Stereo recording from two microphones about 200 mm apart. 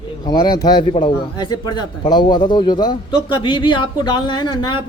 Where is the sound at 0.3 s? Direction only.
20° left (ahead or behind).